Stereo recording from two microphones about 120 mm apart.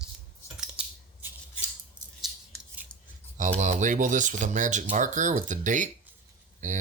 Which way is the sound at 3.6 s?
90° right.